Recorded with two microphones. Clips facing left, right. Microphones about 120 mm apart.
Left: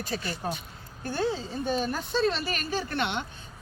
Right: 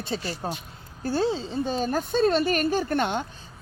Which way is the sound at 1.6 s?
35° right (ahead or behind).